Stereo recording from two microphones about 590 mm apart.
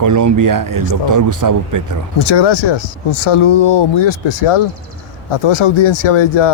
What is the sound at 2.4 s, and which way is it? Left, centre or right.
Speech, left.